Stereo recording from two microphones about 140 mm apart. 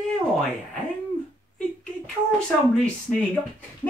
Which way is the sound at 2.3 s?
5° left (ahead or behind).